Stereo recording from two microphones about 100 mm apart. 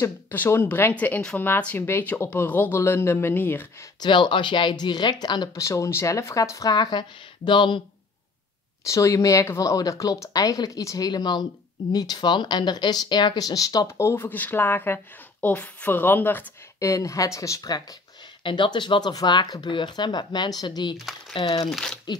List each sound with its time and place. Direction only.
0.0 s speech: 20° left (ahead or behind)
4.0 s speech: 50° left (ahead or behind)
5.6 s speech: 30° left (ahead or behind); by 7.8 s 55° left (ahead or behind)
8.8 s a woman's voice: 30° left (ahead or behind)
16.8 s speech: 30° left (ahead or behind)
18.4 s speech: 55° left (ahead or behind)
20.9 s speech: centre (ahead or behind)
21.3 s speech: 55° left (ahead or behind)
21.6 s speech: centre (ahead or behind)